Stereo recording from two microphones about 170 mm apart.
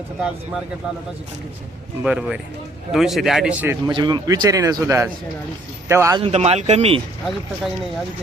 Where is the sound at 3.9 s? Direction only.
25° right (ahead or behind).